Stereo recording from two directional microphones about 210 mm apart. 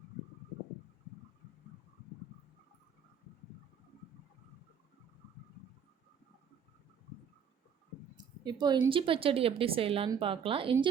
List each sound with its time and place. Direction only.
8.2 s a woman's voice: 20° right (ahead or behind)